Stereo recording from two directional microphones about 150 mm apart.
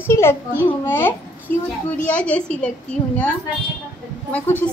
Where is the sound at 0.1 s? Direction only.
15° left (ahead or behind).